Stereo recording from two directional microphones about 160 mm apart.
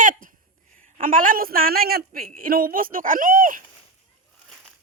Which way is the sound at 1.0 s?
60° right (ahead or behind).